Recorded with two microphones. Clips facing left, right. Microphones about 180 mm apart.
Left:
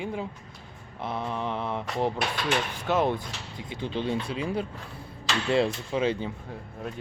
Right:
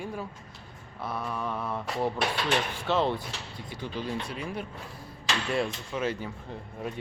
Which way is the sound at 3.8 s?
25° left (ahead or behind).